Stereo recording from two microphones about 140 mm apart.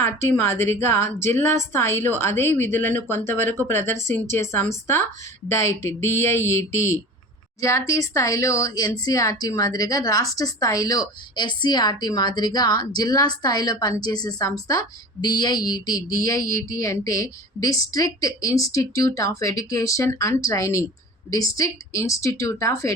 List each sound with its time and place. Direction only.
0.0 s a woman's voice: 15° left (ahead or behind)